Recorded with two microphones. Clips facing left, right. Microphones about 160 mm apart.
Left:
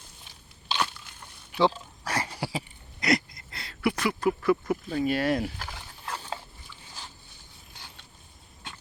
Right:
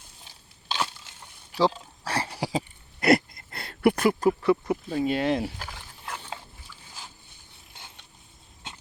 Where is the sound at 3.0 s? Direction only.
55° right (ahead or behind).